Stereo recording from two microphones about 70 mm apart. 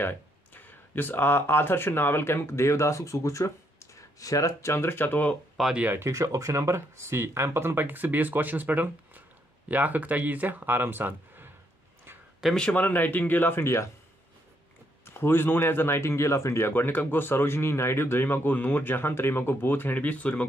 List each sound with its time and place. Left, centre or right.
0.0 s speech: left
5.6 s speech: centre
5.9 s speech: right
12.4 s speech: centre
12.7 s speech: left
15.0 s a man's voice: left